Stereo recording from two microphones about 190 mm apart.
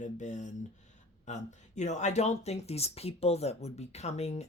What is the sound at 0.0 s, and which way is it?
Speech, 40° left (ahead or behind).